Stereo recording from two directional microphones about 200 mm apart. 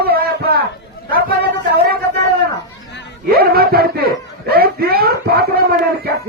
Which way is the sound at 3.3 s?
50° right (ahead or behind).